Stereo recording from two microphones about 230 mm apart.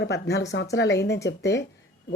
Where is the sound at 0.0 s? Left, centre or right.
Left.